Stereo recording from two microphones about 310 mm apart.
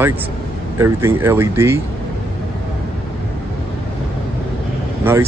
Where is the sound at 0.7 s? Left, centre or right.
Centre.